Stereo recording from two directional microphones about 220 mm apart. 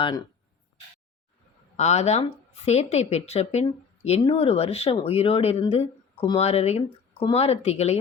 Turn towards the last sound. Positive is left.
turn(degrees=30)  # may be behind; listen again after turning